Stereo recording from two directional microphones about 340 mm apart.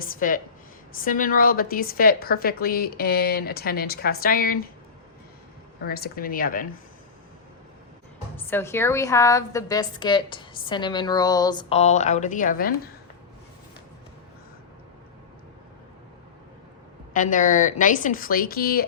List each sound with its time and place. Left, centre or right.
0.0 s a woman's voice: left
5.8 s a woman's voice: left
8.4 s a woman's voice: centre; by 12.9 s left
17.2 s a woman's voice: left